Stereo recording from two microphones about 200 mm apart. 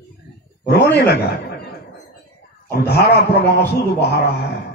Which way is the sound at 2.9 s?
55° left (ahead or behind).